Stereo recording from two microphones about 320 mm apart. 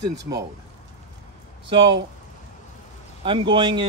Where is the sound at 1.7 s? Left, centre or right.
Centre.